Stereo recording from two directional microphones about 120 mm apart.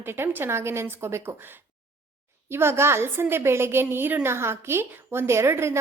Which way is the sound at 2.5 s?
20° right (ahead or behind).